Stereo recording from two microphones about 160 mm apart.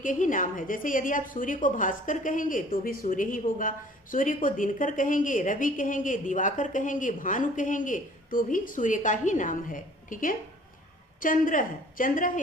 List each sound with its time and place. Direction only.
0.0 s a woman's voice: 55° left (ahead or behind)